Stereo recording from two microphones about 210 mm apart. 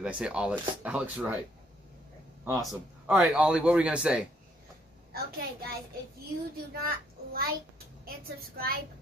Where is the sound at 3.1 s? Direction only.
5° right (ahead or behind).